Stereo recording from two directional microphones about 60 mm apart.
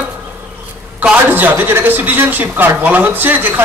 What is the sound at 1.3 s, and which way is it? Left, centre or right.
A man's voice, right.